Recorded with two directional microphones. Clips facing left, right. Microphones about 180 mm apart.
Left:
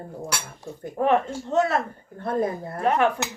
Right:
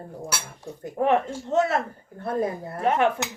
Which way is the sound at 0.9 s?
20° right (ahead or behind).